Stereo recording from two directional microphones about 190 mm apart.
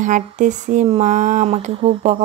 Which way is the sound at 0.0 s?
40° right (ahead or behind).